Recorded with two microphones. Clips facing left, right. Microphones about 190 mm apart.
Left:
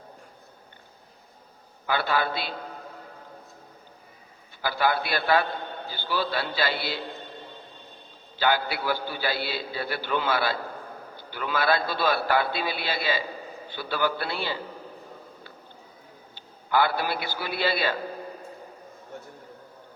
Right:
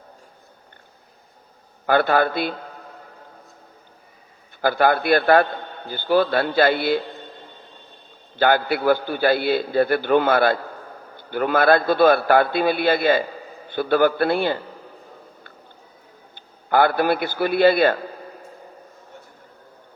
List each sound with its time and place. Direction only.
1.9 s a man's voice: 55° right (ahead or behind)
4.6 s a man's voice: 50° right (ahead or behind)
8.4 s a man's voice: 55° right (ahead or behind)
16.3 s a man's voice: 50° right (ahead or behind)